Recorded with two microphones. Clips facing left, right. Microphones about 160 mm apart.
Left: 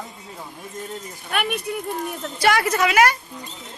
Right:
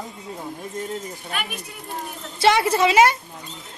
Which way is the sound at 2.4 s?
25° right (ahead or behind).